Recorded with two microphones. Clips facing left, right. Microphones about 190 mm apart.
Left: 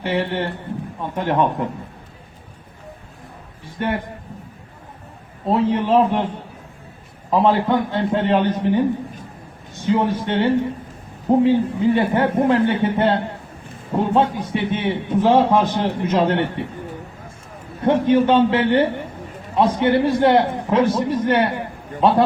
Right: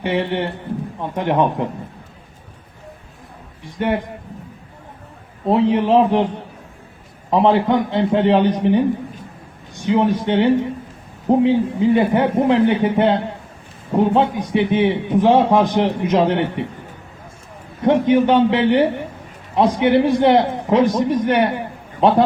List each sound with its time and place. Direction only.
0.0 s a man's voice: 15° right (ahead or behind)
3.8 s a man's voice: 20° right (ahead or behind)
5.5 s a man's voice: 20° right (ahead or behind)
7.3 s a man's voice: 20° right (ahead or behind)
9.8 s a man's voice: 15° right (ahead or behind)
14.2 s a man's voice: 15° right (ahead or behind)
17.8 s a man's voice: 15° right (ahead or behind)